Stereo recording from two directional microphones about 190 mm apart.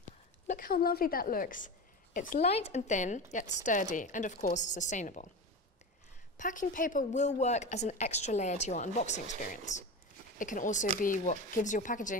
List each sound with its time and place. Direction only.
0.5 s a woman's voice: 50° left (ahead or behind)
2.5 s a woman's voice: 35° left (ahead or behind)
6.3 s a woman's voice: 45° left (ahead or behind)